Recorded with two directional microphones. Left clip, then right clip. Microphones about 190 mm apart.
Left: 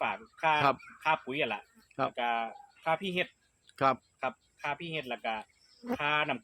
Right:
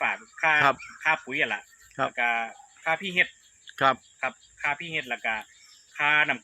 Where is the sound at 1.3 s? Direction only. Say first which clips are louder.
Right 6 dB; 25° left (ahead or behind).